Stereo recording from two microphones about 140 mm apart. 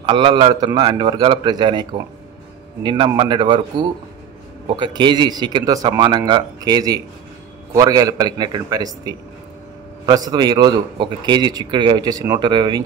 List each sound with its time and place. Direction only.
0.0 s a man's voice: 35° right (ahead or behind)
4.6 s a man's voice: 35° right (ahead or behind)